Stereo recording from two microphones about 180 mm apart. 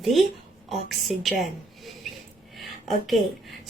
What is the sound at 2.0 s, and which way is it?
Snort, centre (ahead or behind).